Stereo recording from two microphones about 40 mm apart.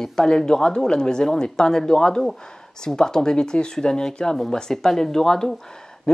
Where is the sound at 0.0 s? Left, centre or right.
Centre.